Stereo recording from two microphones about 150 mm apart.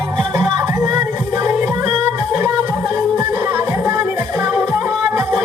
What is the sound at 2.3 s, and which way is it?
Music, 20° right (ahead or behind).